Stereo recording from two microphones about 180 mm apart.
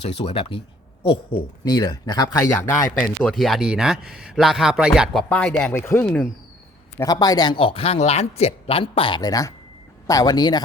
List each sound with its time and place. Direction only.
0.0 s speech: 35° left (ahead or behind)
1.6 s speech: 20° left (ahead or behind)
7.0 s speech: 20° left (ahead or behind)